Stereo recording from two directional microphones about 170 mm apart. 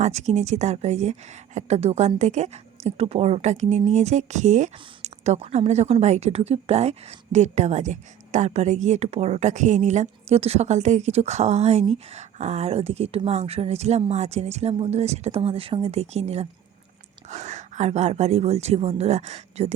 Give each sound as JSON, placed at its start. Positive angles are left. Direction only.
{"t": 0.0, "sound": "a woman's voice", "side_deg": -40}